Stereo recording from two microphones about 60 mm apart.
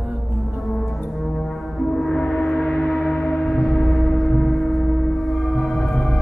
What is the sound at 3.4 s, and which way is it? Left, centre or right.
Gong, centre.